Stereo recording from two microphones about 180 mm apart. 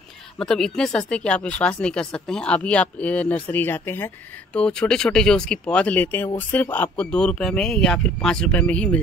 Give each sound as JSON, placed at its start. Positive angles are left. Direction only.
{"t": 0.4, "sound": "speech", "side_deg": 5}